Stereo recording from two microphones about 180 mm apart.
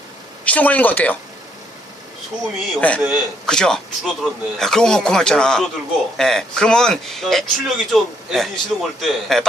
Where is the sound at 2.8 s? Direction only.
5° left (ahead or behind).